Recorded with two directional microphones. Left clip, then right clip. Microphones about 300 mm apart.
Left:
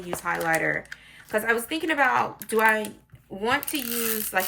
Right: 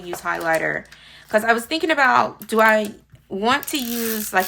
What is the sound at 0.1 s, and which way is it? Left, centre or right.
Speech, centre.